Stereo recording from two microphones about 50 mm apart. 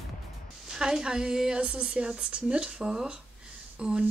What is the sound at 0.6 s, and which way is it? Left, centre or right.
Speech, centre.